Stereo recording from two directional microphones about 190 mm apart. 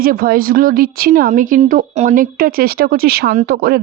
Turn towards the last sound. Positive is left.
turn(degrees=-55)  # may be behind; listen again after turning